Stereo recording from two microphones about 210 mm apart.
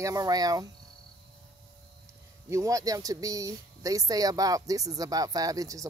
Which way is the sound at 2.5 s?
15° right (ahead or behind).